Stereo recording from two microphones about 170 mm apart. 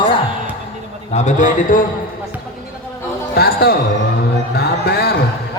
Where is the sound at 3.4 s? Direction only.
65° left (ahead or behind).